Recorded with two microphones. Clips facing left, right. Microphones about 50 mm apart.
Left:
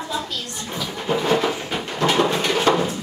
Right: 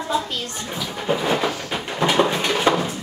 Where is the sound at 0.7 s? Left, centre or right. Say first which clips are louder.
Even; centre.